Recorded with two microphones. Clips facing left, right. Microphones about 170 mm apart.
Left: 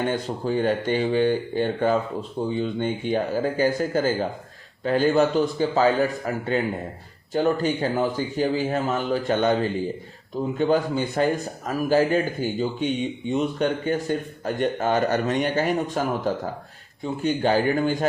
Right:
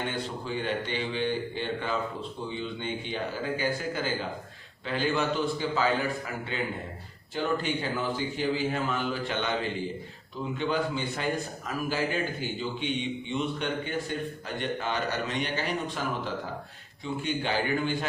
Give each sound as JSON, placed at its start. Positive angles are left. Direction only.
{"t": 0.1, "sound": "a man's voice", "side_deg": 45}